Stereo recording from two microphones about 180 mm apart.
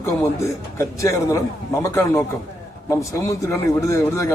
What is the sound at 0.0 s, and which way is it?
A man's voice, 15° left (ahead or behind).